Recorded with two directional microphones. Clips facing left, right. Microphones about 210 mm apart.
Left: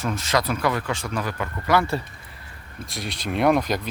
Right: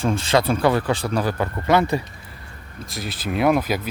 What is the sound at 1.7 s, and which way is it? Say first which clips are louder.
Speech: right 3 dB; 15° right (ahead or behind).